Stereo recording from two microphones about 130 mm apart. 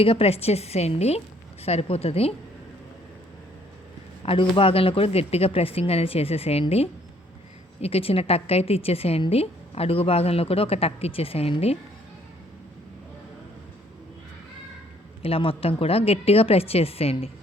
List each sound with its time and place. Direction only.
0.0 s a woman's voice: 50° left (ahead or behind)
4.2 s a woman's voice: 45° left (ahead or behind)
15.2 s a woman's voice: 45° left (ahead or behind)